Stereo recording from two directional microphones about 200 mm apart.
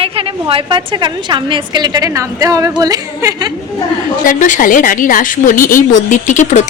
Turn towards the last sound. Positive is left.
turn(degrees=35)  # may be behind; listen again after turning